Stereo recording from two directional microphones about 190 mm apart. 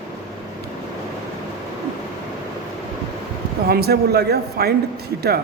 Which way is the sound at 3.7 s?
55° right (ahead or behind).